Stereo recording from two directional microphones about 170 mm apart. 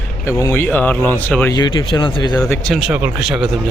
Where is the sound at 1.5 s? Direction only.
25° left (ahead or behind).